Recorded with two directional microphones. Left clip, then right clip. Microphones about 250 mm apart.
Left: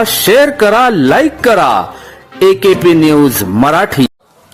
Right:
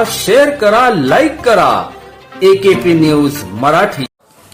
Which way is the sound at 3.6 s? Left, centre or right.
Left.